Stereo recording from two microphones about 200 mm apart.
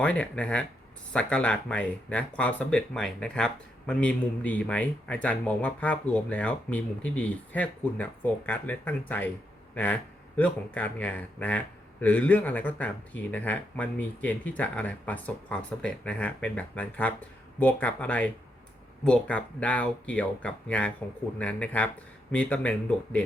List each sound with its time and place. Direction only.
0.0 s speech: 5° left (ahead or behind)